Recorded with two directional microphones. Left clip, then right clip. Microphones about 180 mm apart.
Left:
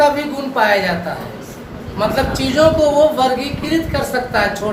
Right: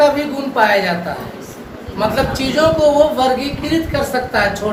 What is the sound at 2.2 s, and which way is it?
Speech, 15° left (ahead or behind).